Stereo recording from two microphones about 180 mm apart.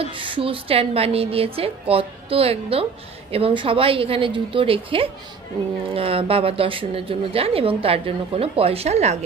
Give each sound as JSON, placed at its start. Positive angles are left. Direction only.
{"t": 0.0, "sound": "a woman's voice", "side_deg": -30}